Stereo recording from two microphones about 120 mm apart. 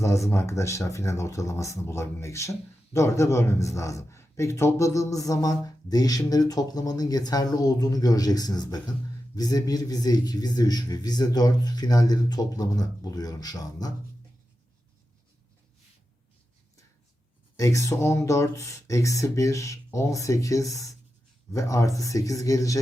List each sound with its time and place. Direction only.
0.0 s speech: 25° left (ahead or behind)
17.6 s speech: 25° left (ahead or behind)